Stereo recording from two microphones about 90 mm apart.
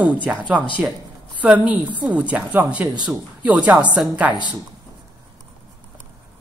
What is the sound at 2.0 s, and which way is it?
Speech, 15° right (ahead or behind).